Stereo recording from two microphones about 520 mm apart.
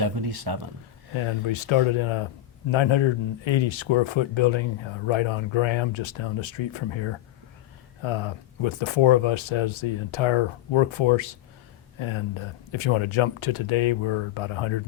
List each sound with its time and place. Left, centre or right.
0.0 s speech: right
1.1 s speech: left